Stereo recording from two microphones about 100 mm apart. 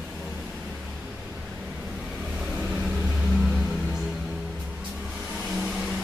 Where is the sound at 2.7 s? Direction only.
5° right (ahead or behind).